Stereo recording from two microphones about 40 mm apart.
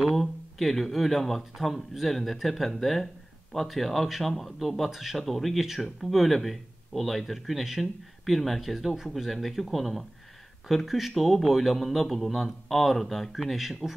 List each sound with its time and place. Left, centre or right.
0.1 s speech: centre
8.7 s speech: centre